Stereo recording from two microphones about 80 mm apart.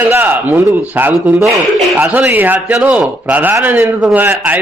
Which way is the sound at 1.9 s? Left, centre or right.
Right.